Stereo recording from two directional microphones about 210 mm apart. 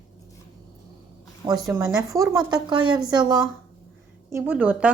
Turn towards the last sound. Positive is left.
turn(degrees=-5)  # may be behind; listen again after turning